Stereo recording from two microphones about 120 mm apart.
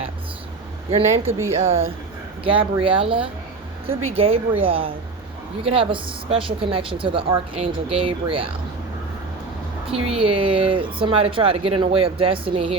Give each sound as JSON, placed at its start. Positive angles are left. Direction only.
{"t": 1.2, "sound": "a woman's voice", "side_deg": -25}
{"t": 2.4, "sound": "speech", "side_deg": -45}
{"t": 9.8, "sound": "speech", "side_deg": -50}